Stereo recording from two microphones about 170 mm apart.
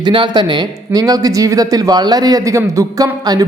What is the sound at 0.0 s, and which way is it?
A man's voice, 25° right (ahead or behind).